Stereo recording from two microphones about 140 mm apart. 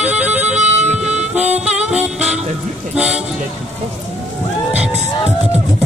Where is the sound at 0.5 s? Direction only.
55° right (ahead or behind).